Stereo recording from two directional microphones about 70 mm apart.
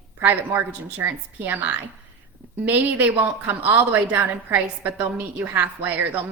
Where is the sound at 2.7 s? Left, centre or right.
Right.